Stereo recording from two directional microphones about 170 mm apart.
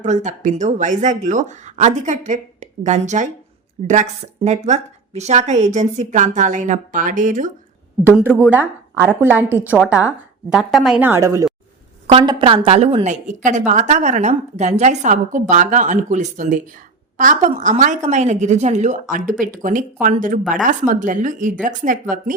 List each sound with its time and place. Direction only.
0.0 s a woman's voice: 45° right (ahead or behind)
8.4 s a woman's voice: 10° right (ahead or behind)
12.1 s a woman's voice: 30° right (ahead or behind); by 21.9 s 50° right (ahead or behind)